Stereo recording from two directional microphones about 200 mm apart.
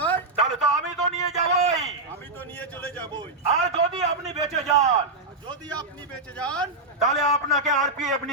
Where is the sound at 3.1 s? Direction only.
25° right (ahead or behind).